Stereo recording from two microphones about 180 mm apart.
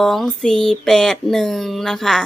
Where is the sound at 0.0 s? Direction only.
Centre (ahead or behind).